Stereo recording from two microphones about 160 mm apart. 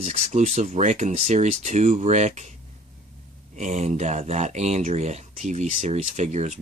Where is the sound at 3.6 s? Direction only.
50° right (ahead or behind).